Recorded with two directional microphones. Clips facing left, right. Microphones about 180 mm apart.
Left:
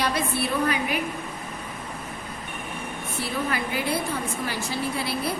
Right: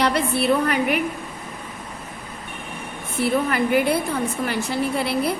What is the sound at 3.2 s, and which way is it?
A woman's voice, 60° right (ahead or behind).